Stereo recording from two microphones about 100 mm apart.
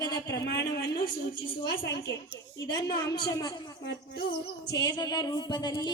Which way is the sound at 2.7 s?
40° left (ahead or behind).